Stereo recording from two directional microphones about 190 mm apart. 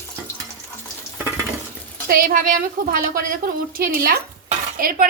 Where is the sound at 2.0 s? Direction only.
50° right (ahead or behind).